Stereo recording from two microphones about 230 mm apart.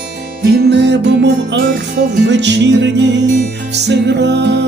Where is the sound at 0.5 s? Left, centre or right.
Right.